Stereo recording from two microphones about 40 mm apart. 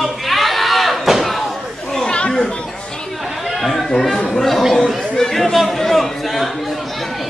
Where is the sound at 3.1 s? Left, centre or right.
Centre.